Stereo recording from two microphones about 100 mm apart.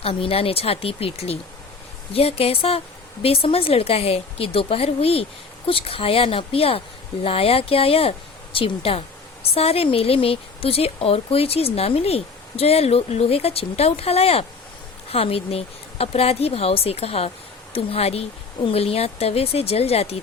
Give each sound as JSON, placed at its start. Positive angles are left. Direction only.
{"t": 0.0, "sound": "a woman's voice", "side_deg": 70}